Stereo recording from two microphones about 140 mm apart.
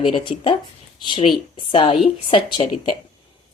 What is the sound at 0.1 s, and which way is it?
A woman's voice, 35° left (ahead or behind).